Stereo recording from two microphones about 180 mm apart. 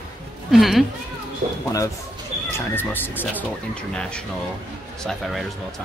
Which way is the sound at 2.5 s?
10° left (ahead or behind).